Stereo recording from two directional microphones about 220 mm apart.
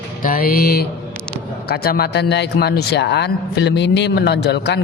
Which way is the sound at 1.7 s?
45° left (ahead or behind).